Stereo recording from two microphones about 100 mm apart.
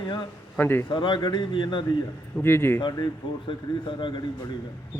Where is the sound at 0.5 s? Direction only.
20° left (ahead or behind).